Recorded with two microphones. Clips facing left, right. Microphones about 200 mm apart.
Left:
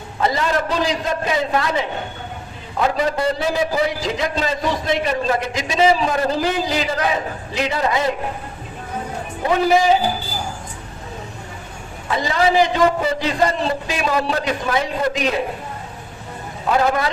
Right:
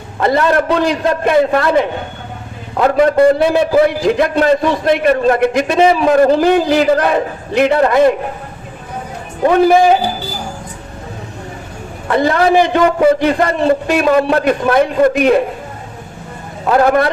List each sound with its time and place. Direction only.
0.2 s a man's voice: 60° right (ahead or behind)
9.4 s a man's voice: 55° right (ahead or behind)
12.0 s a man's voice: 60° right (ahead or behind)
16.7 s a man's voice: 60° right (ahead or behind)